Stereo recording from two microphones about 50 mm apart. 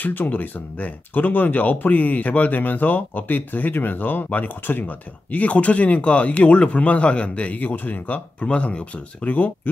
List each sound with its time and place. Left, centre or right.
0.0 s speech: left